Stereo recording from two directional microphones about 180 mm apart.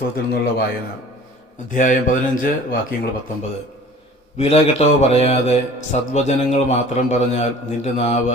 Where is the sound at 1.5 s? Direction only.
45° left (ahead or behind).